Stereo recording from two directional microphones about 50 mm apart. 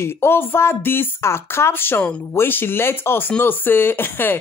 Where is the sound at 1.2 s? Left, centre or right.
Left.